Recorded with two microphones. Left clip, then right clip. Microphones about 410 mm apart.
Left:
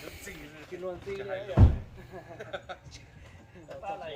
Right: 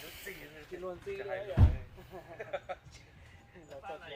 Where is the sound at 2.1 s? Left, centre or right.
Centre.